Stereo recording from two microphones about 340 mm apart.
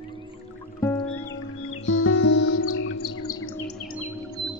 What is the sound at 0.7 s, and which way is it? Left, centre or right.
Music, centre.